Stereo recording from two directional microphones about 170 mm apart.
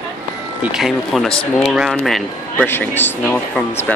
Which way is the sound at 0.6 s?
Centre (ahead or behind).